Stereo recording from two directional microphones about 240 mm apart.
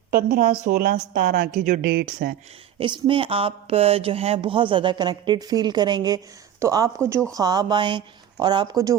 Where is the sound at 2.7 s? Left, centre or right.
Right.